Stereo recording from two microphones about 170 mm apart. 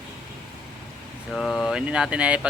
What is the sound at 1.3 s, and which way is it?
Speech, 5° left (ahead or behind).